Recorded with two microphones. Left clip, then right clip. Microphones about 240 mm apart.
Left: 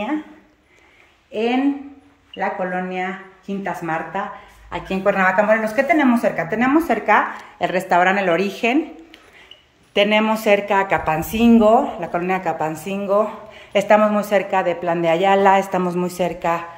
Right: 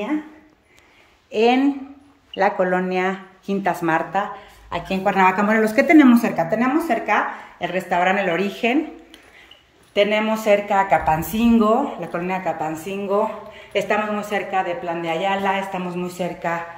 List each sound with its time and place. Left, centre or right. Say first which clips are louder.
1.3 s speech: right 3 dB; centre
6.6 s speech: left 3 dB; centre
9.9 s speech: left 2 dB; centre